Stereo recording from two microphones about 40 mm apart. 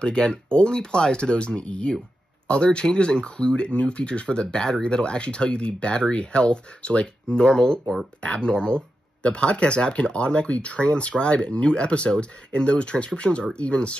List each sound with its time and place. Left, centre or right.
0.0 s speech: left